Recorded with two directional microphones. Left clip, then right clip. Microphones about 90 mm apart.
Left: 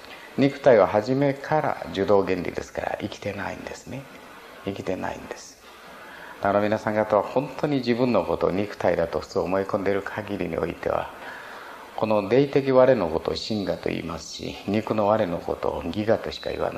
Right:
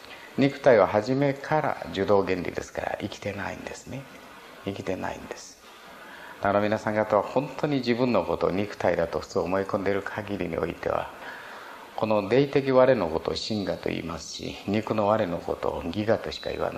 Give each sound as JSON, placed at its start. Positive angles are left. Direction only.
{"t": 0.4, "sound": "speech", "side_deg": -30}
{"t": 6.4, "sound": "speech", "side_deg": -35}